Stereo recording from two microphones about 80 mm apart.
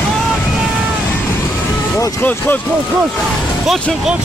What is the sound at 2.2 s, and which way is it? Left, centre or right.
Speech, left.